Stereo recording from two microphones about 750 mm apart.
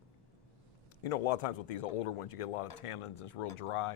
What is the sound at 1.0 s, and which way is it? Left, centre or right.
A man's voice, left.